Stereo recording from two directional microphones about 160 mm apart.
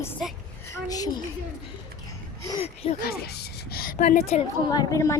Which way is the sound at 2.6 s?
40° left (ahead or behind).